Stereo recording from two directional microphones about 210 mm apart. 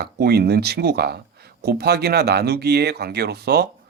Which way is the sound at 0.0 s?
50° right (ahead or behind).